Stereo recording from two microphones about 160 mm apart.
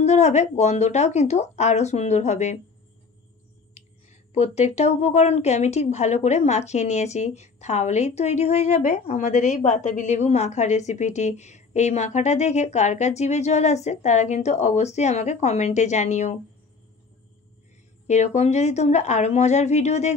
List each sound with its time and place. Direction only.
0.0 s a woman's voice: 45° left (ahead or behind)
4.3 s a woman's voice: 40° left (ahead or behind)
18.0 s a woman's voice: 45° left (ahead or behind)